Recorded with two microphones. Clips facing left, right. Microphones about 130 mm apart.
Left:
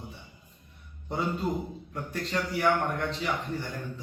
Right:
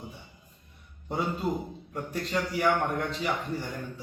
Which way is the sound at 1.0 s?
10° right (ahead or behind).